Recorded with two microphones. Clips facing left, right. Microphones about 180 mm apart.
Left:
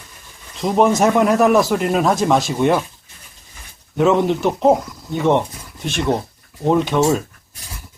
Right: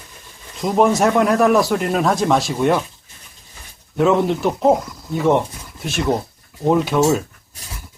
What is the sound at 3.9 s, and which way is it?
Speech, centre (ahead or behind).